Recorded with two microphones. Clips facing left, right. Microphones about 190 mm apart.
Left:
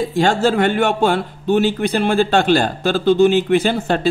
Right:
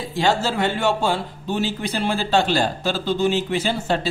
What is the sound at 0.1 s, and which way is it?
Speech, 55° left (ahead or behind).